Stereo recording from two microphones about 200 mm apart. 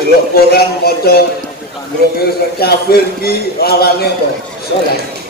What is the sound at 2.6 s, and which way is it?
A man's voice, 50° left (ahead or behind).